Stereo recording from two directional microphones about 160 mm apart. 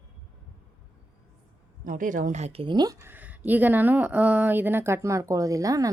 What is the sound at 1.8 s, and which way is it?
Speech, 55° right (ahead or behind).